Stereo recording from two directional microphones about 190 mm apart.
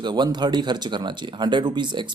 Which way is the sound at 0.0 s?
20° right (ahead or behind).